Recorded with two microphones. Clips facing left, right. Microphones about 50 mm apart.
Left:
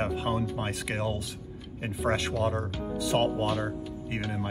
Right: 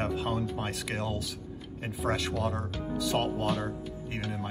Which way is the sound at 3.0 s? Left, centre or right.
Left.